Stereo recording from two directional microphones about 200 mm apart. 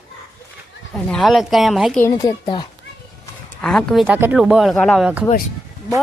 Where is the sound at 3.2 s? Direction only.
5° left (ahead or behind).